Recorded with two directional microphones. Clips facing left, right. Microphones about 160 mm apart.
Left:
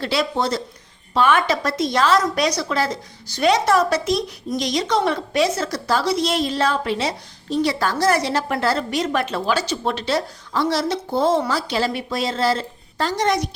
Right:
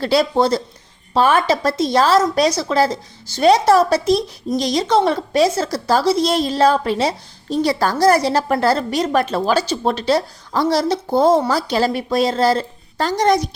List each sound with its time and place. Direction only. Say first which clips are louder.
0.0 s a woman's voice: right 6 dB; 40° right (ahead or behind)